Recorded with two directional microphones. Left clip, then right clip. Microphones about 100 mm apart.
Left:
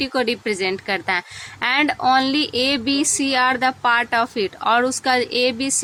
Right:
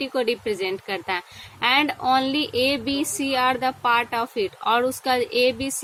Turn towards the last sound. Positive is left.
turn(degrees=30)  # may be behind; listen again after turning